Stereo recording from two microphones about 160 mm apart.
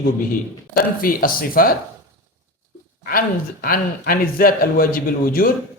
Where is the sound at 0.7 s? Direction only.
65° left (ahead or behind).